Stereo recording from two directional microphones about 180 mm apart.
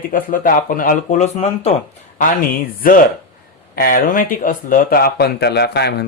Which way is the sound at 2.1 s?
50° left (ahead or behind).